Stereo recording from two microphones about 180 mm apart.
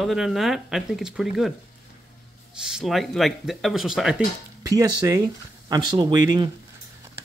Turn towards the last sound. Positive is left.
turn(degrees=-20)  # may be behind; listen again after turning